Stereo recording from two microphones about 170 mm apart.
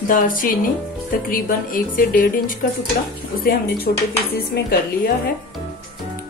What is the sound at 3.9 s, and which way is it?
Speech, 55° left (ahead or behind).